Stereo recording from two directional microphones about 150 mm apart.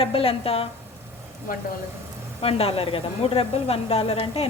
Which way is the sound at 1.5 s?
65° left (ahead or behind).